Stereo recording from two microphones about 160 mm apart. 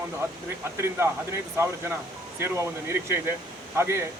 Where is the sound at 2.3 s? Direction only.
15° right (ahead or behind).